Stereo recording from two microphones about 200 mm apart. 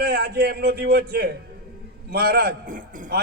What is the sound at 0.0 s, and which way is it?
A man's voice, 50° right (ahead or behind).